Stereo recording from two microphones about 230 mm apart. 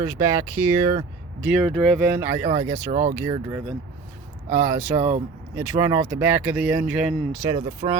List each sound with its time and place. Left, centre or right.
0.0 s speech: centre
1.4 s speech: centre
2.9 s speech: right
3.2 s speech: centre
4.4 s speech: centre
7.5 s speech: centre